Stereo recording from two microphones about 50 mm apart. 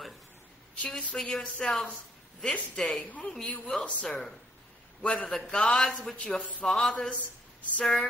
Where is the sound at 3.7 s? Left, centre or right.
Left.